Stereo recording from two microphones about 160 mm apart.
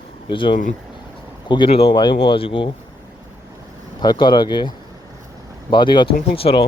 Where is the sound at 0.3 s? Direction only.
30° left (ahead or behind).